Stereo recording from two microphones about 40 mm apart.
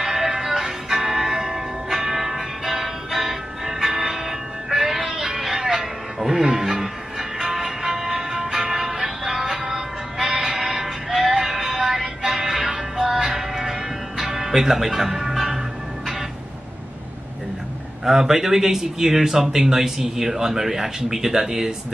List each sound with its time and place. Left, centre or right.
0.0 s music: centre
18.0 s speech: centre